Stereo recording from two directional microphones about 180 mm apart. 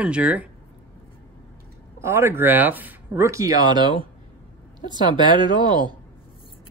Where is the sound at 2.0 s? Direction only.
15° right (ahead or behind).